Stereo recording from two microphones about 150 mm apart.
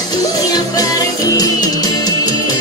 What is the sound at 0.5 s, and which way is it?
Music, 25° left (ahead or behind).